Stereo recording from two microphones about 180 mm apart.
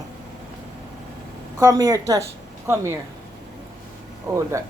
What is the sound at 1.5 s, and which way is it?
Speech, 20° right (ahead or behind).